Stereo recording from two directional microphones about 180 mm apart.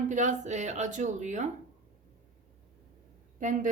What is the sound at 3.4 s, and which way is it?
Speech, 45° right (ahead or behind).